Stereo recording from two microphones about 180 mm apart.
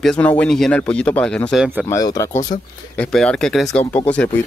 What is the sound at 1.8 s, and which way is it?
Speech, 20° left (ahead or behind).